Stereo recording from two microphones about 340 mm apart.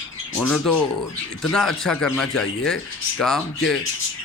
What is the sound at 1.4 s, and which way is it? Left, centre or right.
A man's voice, centre.